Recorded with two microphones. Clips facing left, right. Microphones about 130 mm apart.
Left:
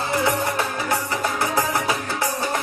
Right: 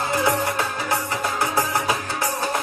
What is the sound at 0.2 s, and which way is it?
Music, 20° left (ahead or behind).